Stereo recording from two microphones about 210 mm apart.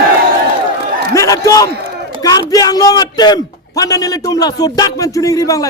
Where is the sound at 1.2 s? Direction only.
15° left (ahead or behind).